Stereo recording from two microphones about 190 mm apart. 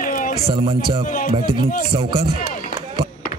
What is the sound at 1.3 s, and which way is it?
Speech, 25° right (ahead or behind).